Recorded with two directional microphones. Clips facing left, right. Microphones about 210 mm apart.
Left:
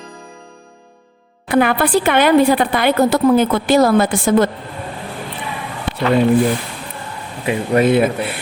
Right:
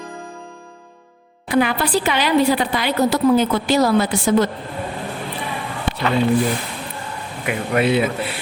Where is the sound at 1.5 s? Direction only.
55° left (ahead or behind).